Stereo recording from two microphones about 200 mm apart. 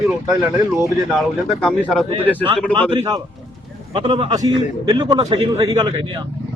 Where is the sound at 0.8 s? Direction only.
Centre (ahead or behind).